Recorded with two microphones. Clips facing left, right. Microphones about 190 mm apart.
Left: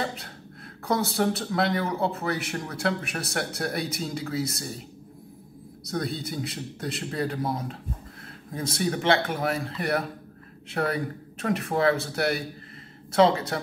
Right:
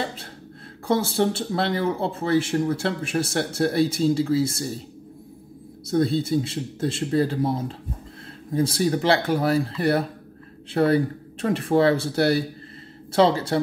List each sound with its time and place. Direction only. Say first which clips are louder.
0.8 s speech: right 3 dB; 30° right (ahead or behind)
5.9 s speech: right 9 dB; 25° right (ahead or behind)